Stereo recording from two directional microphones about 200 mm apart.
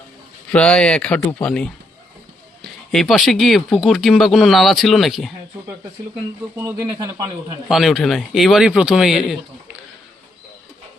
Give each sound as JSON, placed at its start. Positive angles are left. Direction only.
{"t": 0.5, "sound": "speech", "side_deg": 5}
{"t": 6.6, "sound": "speech", "side_deg": -15}
{"t": 7.7, "sound": "speech", "side_deg": 0}